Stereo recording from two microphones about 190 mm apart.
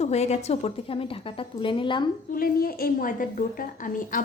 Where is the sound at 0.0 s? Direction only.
35° left (ahead or behind).